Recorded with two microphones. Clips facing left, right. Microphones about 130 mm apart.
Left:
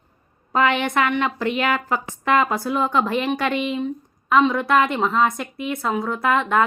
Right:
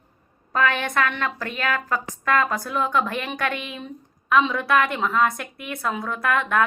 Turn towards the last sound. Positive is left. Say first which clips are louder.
# left 3 dB
turn(degrees=20)  # may be behind; listen again after turning